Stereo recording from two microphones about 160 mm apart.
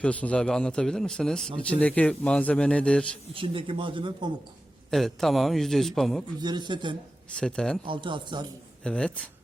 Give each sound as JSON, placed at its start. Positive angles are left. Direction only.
{"t": 0.0, "sound": "a man's voice", "side_deg": 10}
{"t": 3.3, "sound": "speech", "side_deg": -35}
{"t": 4.9, "sound": "a man's voice", "side_deg": 0}
{"t": 6.4, "sound": "speech", "side_deg": -30}
{"t": 7.3, "sound": "a man's voice", "side_deg": 5}
{"t": 7.9, "sound": "speech", "side_deg": -30}
{"t": 8.8, "sound": "a man's voice", "side_deg": 5}